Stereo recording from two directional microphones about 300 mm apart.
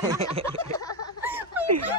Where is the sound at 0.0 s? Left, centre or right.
Centre.